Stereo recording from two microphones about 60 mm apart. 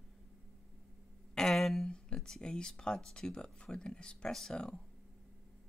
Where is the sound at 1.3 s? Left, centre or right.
Centre.